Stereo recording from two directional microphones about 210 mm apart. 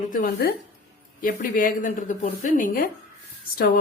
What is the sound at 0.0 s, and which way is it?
A woman's voice, 40° left (ahead or behind).